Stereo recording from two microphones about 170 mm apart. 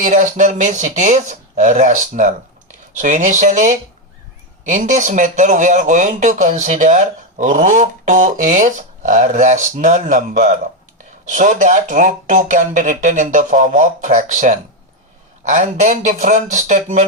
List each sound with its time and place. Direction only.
0.0 s a man's voice: 45° right (ahead or behind)